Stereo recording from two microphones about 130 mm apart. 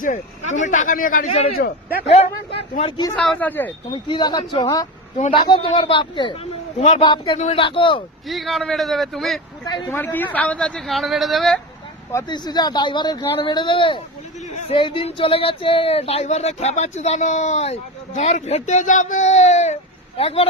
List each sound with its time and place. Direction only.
0.0 s speech: 75° left (ahead or behind); by 1.3 s 90° left
1.3 s speech: 50° left (ahead or behind)
3.3 s a man's voice: 15° left (ahead or behind)
3.9 s speech: 35° left (ahead or behind)
6.7 s speech: 55° left (ahead or behind)
7.0 s speech: 35° left (ahead or behind)
7.3 s speech: 60° left (ahead or behind)
7.6 s speech: 40° left (ahead or behind)
8.3 s a man's voice: centre (ahead or behind)
9.8 s a man's voice: 15° left (ahead or behind)
12.3 s speech: 30° left (ahead or behind); by 17.7 s 55° left (ahead or behind)
18.2 s speech: 70° left (ahead or behind); by 20.5 s 50° left (ahead or behind)